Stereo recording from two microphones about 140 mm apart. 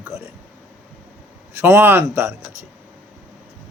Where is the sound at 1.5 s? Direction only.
15° right (ahead or behind).